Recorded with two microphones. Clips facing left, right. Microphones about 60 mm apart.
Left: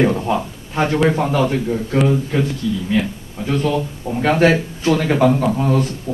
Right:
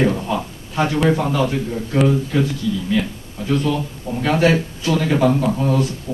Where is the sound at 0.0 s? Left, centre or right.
Centre.